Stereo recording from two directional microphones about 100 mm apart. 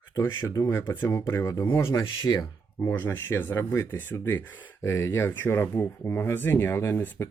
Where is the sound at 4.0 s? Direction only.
20° left (ahead or behind).